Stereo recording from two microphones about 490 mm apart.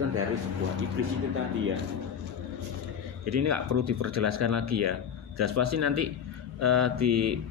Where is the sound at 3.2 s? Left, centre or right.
Right.